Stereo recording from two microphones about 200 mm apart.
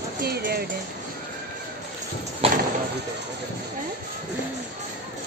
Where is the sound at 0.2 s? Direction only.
50° right (ahead or behind).